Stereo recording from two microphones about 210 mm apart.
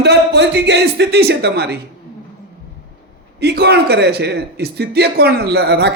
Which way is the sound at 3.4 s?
50° right (ahead or behind).